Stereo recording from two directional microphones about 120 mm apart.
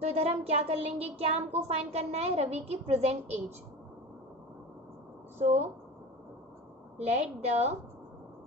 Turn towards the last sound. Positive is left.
turn(degrees=-65)  # may be behind; listen again after turning